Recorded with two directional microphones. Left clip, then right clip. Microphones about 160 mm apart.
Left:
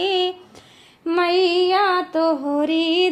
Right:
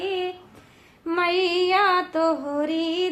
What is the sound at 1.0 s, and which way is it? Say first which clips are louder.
Female singing: left 4 dB; 25° left (ahead or behind).